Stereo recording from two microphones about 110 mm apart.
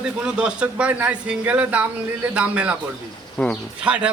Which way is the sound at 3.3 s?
5° left (ahead or behind).